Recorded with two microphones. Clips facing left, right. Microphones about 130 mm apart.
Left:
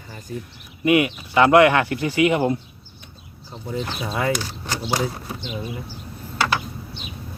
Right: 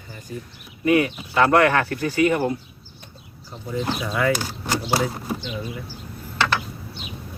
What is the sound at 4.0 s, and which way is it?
Speech, 30° left (ahead or behind).